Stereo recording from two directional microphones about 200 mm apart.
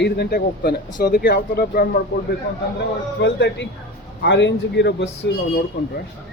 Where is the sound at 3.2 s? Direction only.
60° left (ahead or behind).